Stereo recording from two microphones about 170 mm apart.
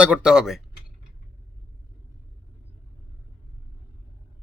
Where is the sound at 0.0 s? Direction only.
5° right (ahead or behind).